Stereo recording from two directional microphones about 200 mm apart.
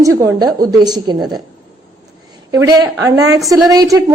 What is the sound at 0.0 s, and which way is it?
A woman's voice, 15° right (ahead or behind).